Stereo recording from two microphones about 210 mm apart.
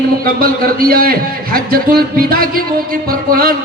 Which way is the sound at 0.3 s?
45° right (ahead or behind).